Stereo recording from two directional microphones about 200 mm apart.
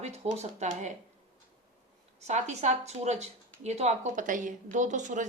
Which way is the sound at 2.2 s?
35° right (ahead or behind).